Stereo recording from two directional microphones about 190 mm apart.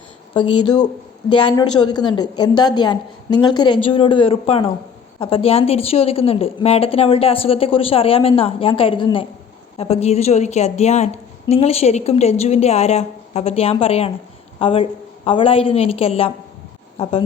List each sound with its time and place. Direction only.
0.3 s a woman's voice: 20° left (ahead or behind)